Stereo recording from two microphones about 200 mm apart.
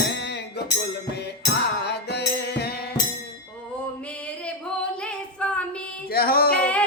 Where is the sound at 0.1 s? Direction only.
60° left (ahead or behind).